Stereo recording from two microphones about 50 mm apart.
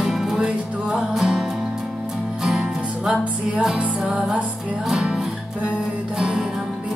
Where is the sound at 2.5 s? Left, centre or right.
Centre.